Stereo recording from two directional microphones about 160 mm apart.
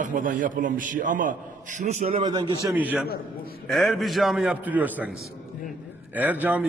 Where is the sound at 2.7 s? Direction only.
10° right (ahead or behind).